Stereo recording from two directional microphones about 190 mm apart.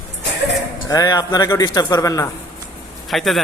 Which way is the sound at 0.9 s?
20° left (ahead or behind).